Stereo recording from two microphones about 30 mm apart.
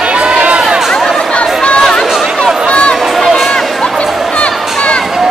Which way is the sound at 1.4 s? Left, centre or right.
Left.